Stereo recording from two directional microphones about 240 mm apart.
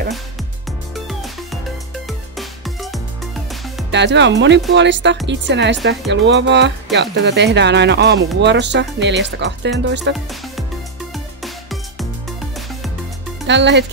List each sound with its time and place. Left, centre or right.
0.7 s music: centre
3.9 s speech: right
11.4 s music: centre
13.5 s speech: right